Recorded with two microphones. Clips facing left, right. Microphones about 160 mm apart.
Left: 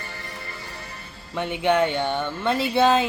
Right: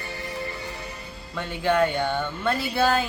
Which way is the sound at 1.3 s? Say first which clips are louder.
Left 2 dB; 20° left (ahead or behind).